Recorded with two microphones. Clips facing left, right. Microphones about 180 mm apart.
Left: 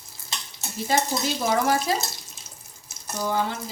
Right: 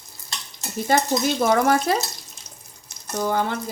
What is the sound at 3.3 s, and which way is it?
Speech, 55° right (ahead or behind).